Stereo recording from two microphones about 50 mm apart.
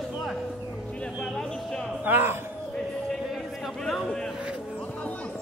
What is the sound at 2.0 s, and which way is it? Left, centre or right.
Speech, right.